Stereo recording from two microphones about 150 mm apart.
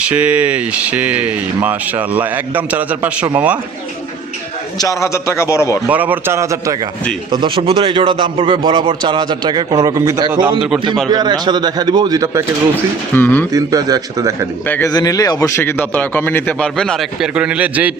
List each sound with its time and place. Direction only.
0.0 s speech: 10° right (ahead or behind)
4.8 s a man's voice: 20° left (ahead or behind)
5.9 s speech: 10° right (ahead or behind)
7.3 s a man's voice: 30° right (ahead or behind)
13.1 s a man's voice: 10° left (ahead or behind)
13.5 s a man's voice: 25° right (ahead or behind)
14.7 s a man's voice: 15° left (ahead or behind); by 17.9 s 10° right (ahead or behind)